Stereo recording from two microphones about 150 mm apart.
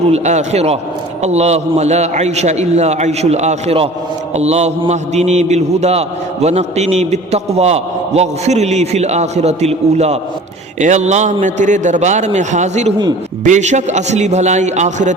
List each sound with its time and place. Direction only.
0.1 s a man's voice: 50° right (ahead or behind)